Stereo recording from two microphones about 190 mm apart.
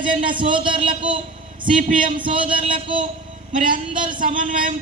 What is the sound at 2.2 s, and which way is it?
Speech, 25° right (ahead or behind).